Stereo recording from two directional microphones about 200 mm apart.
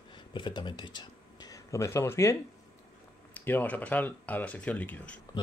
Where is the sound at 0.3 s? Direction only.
25° left (ahead or behind).